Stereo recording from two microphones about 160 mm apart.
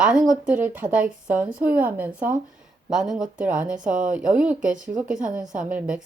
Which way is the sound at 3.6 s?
55° right (ahead or behind).